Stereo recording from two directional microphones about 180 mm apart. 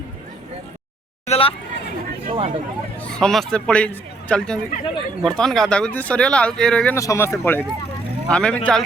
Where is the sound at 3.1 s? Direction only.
5° left (ahead or behind).